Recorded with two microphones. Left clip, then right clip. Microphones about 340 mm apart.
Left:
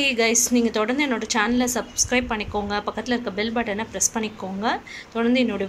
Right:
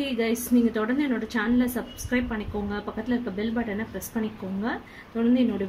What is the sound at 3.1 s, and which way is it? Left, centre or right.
Speech, left.